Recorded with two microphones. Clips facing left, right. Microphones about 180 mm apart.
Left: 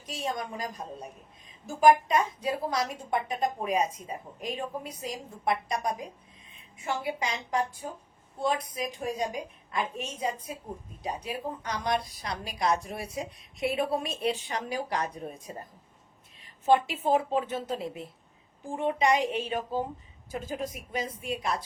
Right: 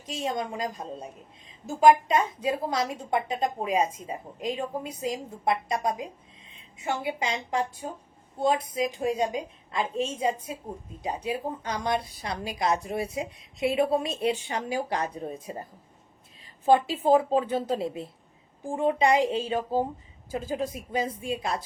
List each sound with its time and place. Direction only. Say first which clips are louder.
0.0 s a woman's voice: right 3 dB; 25° right (ahead or behind)
16.6 s a woman's voice: right 3 dB; 30° right (ahead or behind)